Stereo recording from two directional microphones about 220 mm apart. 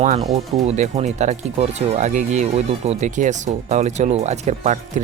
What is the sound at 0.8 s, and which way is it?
Speech, 30° right (ahead or behind).